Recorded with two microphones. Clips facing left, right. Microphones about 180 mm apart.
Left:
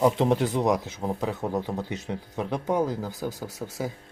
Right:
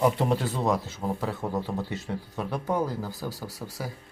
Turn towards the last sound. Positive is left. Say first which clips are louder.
# left 4 dB
turn(degrees=20)  # may be behind; listen again after turning